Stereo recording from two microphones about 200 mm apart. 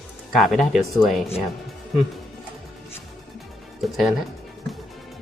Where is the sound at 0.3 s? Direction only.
Centre (ahead or behind).